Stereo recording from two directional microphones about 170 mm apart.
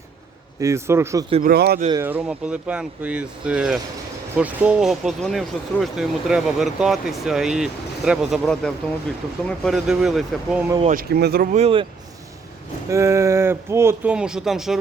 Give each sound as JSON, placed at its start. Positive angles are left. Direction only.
{"t": 0.6, "sound": "speech", "side_deg": -15}
{"t": 1.4, "sound": "speech", "side_deg": -65}
{"t": 1.9, "sound": "speech", "side_deg": -15}
{"t": 10.9, "sound": "speech", "side_deg": -65}
{"t": 11.5, "sound": "speech", "side_deg": -35}
{"t": 12.9, "sound": "speech", "side_deg": -15}